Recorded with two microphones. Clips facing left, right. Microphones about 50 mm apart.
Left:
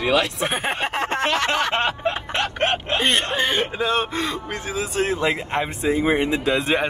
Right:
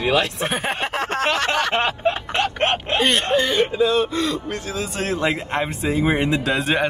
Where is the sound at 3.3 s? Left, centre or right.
Left.